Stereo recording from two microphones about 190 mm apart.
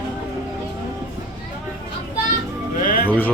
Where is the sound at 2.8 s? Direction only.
50° left (ahead or behind).